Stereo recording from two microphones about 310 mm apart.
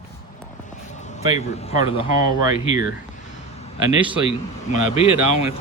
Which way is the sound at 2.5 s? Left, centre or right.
Right.